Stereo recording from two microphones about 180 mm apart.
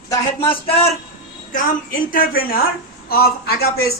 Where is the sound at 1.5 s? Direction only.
50° left (ahead or behind).